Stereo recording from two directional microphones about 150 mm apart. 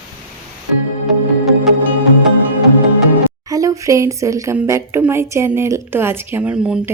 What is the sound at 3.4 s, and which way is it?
Speech, 20° right (ahead or behind).